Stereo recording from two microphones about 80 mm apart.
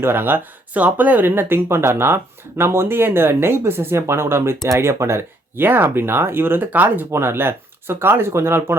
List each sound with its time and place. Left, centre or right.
0.0 s speech: right